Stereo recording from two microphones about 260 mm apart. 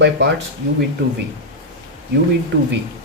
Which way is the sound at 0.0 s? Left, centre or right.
Right.